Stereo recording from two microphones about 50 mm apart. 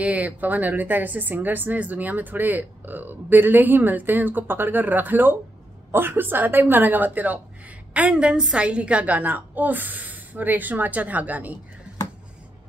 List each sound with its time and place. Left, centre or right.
0.0 s speech: right
8.1 s speech: centre